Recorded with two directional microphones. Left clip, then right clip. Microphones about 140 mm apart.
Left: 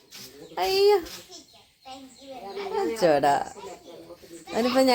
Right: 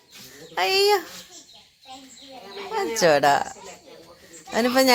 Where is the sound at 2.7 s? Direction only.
25° right (ahead or behind).